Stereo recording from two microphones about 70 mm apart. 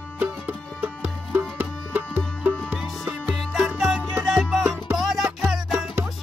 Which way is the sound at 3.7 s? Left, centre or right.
Centre.